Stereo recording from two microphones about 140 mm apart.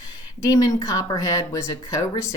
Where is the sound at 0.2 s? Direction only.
25° left (ahead or behind).